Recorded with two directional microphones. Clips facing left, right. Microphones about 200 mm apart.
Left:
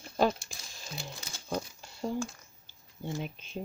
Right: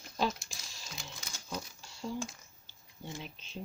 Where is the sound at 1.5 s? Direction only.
55° left (ahead or behind).